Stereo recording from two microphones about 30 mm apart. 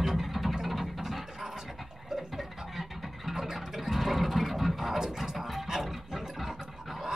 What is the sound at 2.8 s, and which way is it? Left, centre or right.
Music, centre.